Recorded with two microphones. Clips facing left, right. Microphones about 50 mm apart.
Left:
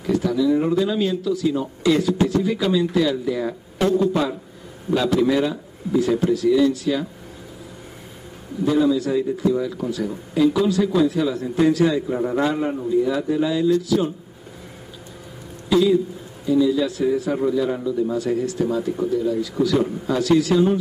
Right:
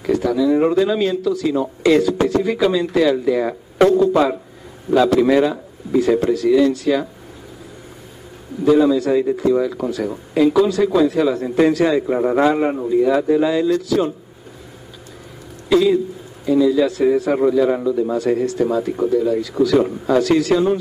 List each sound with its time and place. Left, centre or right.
0.0 s speech: right
1.8 s speech: right
4.9 s speech: right
8.6 s speech: right
12.5 s speech: right
15.7 s speech: right